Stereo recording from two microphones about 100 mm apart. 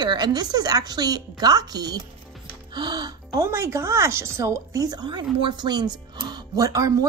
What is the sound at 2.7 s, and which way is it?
Music, 45° right (ahead or behind).